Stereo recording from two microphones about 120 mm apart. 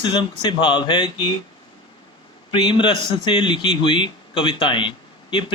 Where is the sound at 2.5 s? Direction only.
45° left (ahead or behind).